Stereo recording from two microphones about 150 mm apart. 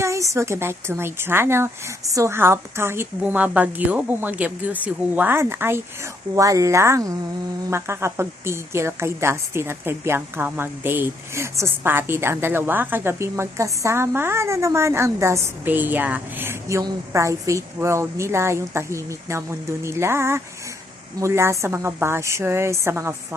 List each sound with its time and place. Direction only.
0.0 s a woman's voice: 20° right (ahead or behind)